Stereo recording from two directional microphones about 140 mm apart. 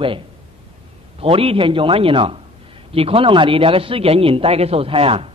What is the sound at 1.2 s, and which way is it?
A woman's voice, 40° right (ahead or behind).